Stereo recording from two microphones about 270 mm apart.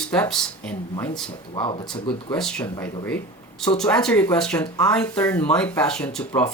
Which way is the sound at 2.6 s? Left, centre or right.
Centre.